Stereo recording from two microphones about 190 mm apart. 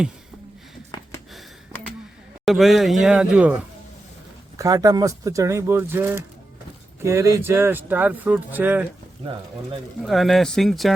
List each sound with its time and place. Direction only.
2.4 s a man's voice: centre (ahead or behind)
4.5 s speech: 20° right (ahead or behind)
10.0 s a man's voice: centre (ahead or behind)